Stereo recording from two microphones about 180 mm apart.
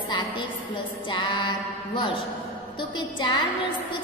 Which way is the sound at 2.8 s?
25° left (ahead or behind).